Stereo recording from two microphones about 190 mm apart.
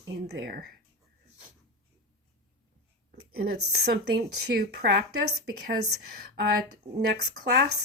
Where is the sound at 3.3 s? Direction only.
55° right (ahead or behind).